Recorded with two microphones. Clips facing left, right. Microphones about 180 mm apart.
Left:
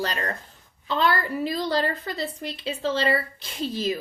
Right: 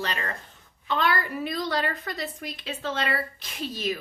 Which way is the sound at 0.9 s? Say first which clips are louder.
Left 2 dB; 30° left (ahead or behind).